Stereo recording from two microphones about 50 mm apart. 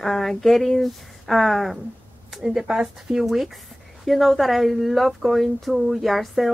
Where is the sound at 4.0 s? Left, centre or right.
Centre.